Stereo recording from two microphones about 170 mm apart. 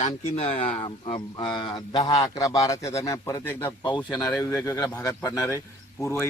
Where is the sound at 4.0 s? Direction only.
25° left (ahead or behind).